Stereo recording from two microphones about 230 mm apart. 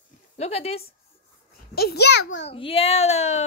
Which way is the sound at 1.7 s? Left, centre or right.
Left.